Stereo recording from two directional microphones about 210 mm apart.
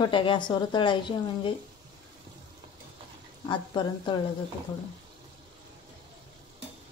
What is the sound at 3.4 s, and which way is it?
Speech, 20° left (ahead or behind).